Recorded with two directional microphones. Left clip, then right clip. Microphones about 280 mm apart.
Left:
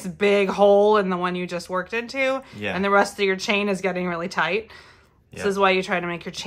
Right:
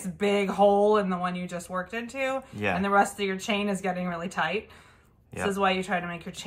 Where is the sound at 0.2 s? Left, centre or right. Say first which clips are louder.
Left 5 dB; left.